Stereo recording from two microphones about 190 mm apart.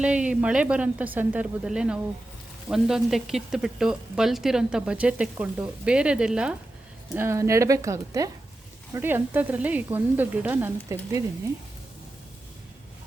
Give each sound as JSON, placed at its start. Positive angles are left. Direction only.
{"t": 0.0, "sound": "a woman's voice", "side_deg": -5}